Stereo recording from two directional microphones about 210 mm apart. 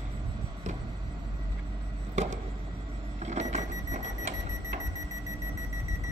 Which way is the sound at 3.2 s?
35° right (ahead or behind).